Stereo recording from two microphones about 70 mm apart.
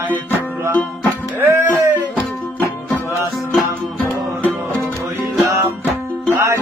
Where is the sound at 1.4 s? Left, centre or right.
Right.